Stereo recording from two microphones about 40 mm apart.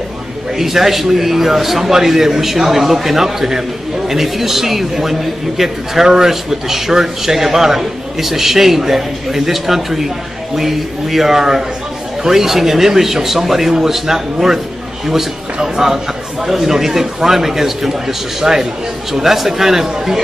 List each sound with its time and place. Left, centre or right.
0.6 s a man's voice: centre